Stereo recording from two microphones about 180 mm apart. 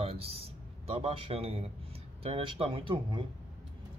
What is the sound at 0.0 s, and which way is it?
A man's voice, 35° right (ahead or behind).